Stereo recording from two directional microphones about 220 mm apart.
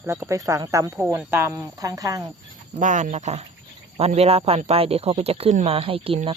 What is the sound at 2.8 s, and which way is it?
Speech, 35° right (ahead or behind).